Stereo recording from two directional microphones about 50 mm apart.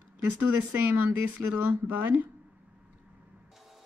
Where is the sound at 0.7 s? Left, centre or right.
Right.